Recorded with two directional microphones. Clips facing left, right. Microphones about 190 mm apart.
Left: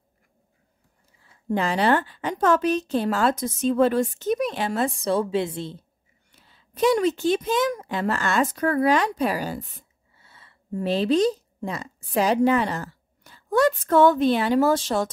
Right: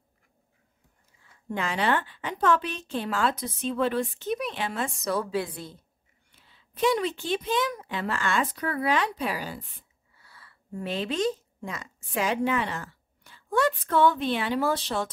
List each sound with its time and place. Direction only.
1.3 s a woman's voice: 35° left (ahead or behind)
6.3 s a woman's voice: 40° left (ahead or behind)
10.1 s a woman's voice: 25° left (ahead or behind); by 15.0 s 45° left (ahead or behind)